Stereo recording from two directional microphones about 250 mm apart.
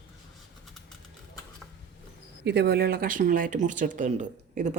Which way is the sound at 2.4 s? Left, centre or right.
Right.